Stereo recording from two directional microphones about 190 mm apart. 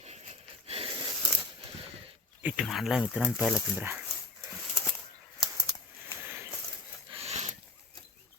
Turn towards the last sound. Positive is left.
turn(degrees=-35)  # may be behind; listen again after turning